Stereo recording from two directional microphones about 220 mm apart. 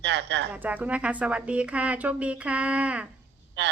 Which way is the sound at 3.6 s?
50° right (ahead or behind).